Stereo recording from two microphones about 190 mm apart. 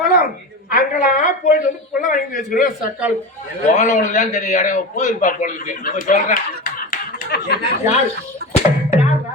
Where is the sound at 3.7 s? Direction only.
40° left (ahead or behind).